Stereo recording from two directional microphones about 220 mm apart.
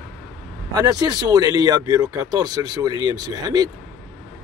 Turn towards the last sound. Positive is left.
turn(degrees=-15)  # may be behind; listen again after turning